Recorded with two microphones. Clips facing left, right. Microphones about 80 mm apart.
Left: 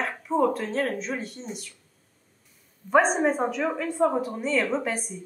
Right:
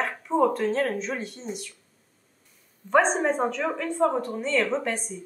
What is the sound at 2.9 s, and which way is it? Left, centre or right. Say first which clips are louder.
A woman's voice: left 1 dB; centre.